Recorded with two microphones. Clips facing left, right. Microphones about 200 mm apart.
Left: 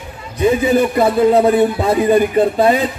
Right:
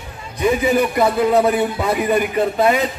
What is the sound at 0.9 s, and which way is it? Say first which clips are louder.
A man's voice: left 3 dB; 30° left (ahead or behind).